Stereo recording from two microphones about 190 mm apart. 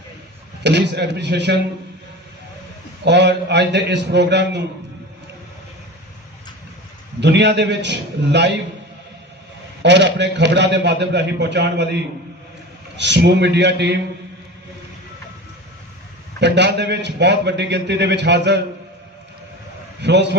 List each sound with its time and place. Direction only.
0.6 s a man's voice: 60° right (ahead or behind)
3.0 s a man's voice: 65° right (ahead or behind)
7.2 s a man's voice: 65° right (ahead or behind)
9.8 s a man's voice: 65° right (ahead or behind)
13.0 s a man's voice: 65° right (ahead or behind)
16.4 s a man's voice: 65° right (ahead or behind)
20.0 s a man's voice: 65° right (ahead or behind)